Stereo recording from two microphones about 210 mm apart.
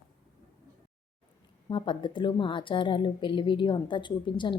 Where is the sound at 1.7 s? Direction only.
20° left (ahead or behind).